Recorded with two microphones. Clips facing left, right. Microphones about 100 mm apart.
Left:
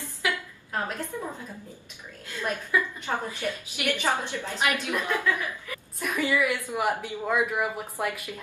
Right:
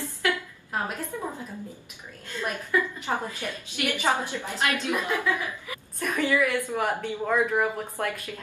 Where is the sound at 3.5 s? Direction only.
15° left (ahead or behind).